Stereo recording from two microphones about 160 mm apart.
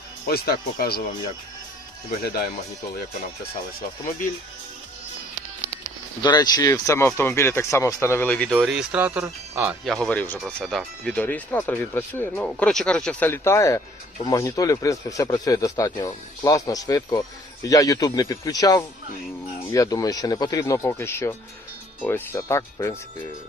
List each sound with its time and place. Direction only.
0.3 s speech: 75° left (ahead or behind)
2.2 s speech: 70° left (ahead or behind)
6.2 s speech: 25° left (ahead or behind); by 8.5 s 5° left (ahead or behind)
8.5 s speech: 5° right (ahead or behind)
9.8 s speech: 5° left (ahead or behind)